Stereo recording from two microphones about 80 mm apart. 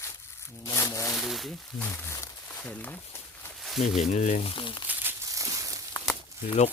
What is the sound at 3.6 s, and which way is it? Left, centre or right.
Speech, centre.